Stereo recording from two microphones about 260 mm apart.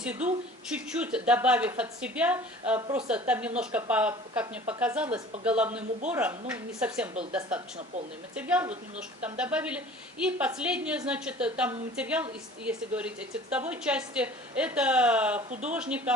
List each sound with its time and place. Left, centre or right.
0.0 s a woman's voice: centre